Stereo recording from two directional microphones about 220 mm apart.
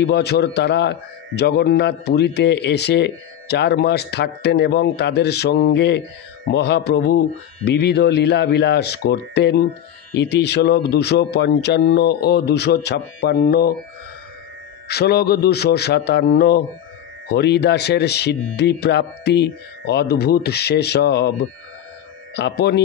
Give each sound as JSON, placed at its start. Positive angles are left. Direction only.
{"t": 0.0, "sound": "a man's voice", "side_deg": 50}
{"t": 14.9, "sound": "a man's voice", "side_deg": 45}